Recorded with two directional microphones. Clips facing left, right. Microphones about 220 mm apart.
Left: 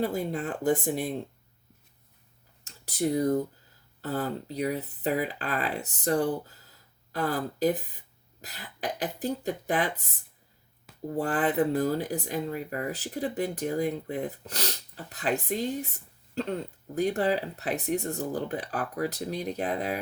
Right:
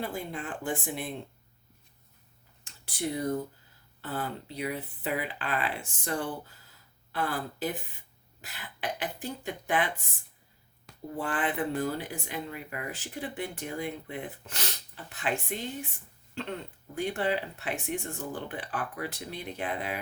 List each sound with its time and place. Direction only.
0.0 s speech: 40° left (ahead or behind)
2.6 s speech: 40° left (ahead or behind)
11.2 s speech: 40° left (ahead or behind)